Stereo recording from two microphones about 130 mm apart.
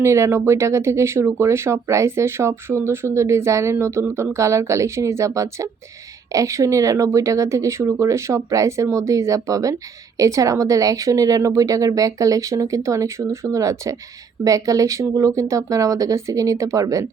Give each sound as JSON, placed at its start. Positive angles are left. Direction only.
{"t": 0.0, "sound": "speech", "side_deg": -20}